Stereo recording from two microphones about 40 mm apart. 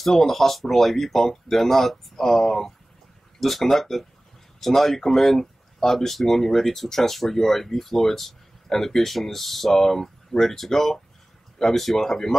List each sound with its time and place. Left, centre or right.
0.0 s speech: centre